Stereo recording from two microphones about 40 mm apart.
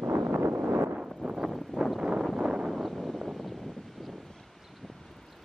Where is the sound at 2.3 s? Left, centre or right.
Right.